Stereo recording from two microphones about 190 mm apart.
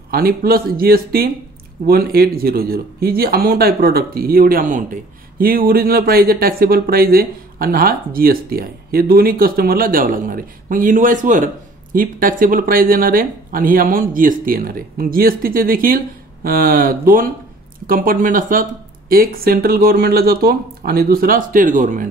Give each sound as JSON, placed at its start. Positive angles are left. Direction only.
{"t": 0.1, "sound": "speech", "side_deg": -50}